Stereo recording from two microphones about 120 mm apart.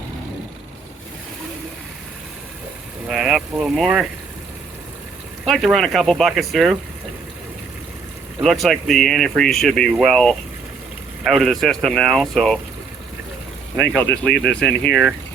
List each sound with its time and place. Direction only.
3.1 s speech: centre (ahead or behind)
5.5 s speech: 5° left (ahead or behind)
8.4 s speech: centre (ahead or behind)
13.7 s speech: 15° left (ahead or behind)
14.3 s speech: 5° left (ahead or behind)